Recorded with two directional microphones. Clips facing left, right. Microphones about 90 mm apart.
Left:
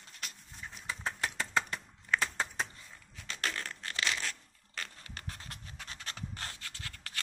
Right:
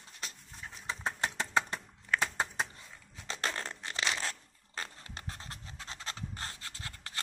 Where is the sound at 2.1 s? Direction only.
15° right (ahead or behind).